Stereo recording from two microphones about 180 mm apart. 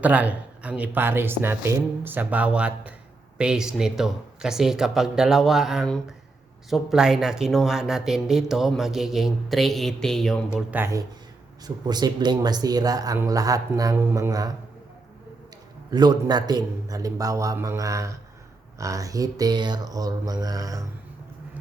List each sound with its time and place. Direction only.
0.0 s speech: 10° right (ahead or behind)
15.9 s speech: 20° right (ahead or behind)